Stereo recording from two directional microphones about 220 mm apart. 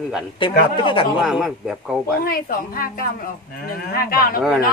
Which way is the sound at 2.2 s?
40° left (ahead or behind).